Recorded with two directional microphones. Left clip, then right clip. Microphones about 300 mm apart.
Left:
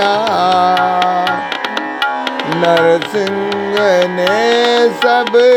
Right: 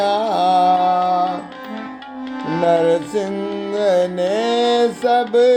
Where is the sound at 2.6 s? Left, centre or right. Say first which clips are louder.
Left 4 dB; centre.